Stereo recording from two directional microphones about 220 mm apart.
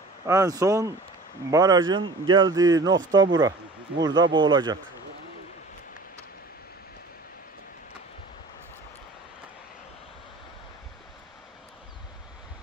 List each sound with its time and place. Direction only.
0.3 s speech: 15° right (ahead or behind)